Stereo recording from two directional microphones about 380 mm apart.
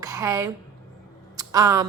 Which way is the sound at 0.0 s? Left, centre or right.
Centre.